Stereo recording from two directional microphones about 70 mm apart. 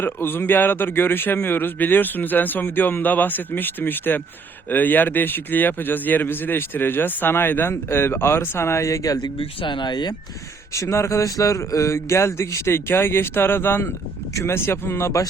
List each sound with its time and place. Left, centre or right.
0.0 s a man's voice: left
9.8 s speech: left
10.8 s speech: left